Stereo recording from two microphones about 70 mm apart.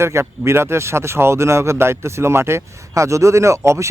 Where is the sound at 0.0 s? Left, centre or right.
Right.